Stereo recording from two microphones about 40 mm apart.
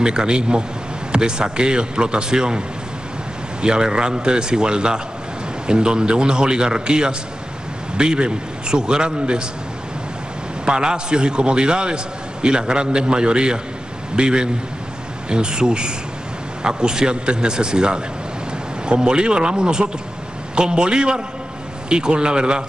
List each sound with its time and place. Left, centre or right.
0.0 s a man's voice: right
3.6 s a man's voice: right
10.6 s a man's voice: right